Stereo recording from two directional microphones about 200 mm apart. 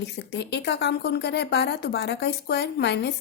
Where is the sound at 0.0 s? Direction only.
55° left (ahead or behind).